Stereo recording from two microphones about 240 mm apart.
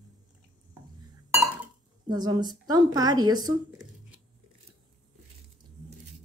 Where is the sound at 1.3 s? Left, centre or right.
Centre.